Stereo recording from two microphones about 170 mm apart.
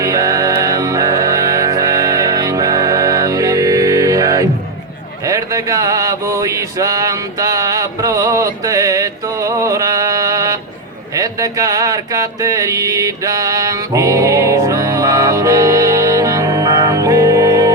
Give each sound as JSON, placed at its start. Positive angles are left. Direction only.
{"t": 0.0, "sound": "music", "side_deg": -20}
{"t": 5.2, "sound": "male singing", "side_deg": -20}
{"t": 11.1, "sound": "a sound", "side_deg": -20}